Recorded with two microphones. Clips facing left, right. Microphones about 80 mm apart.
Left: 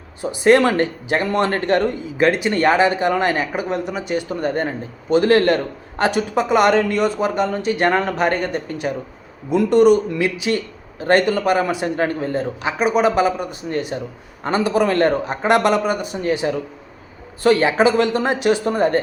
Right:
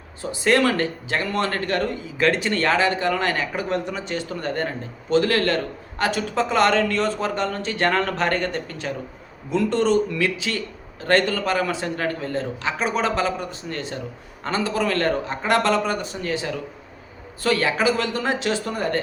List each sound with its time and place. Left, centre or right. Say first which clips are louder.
0.2 s speech: left 6 dB; left
13.9 s speech: left 5 dB; left